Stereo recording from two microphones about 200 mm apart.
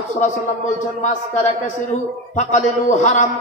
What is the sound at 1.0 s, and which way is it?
A man's voice, 35° left (ahead or behind).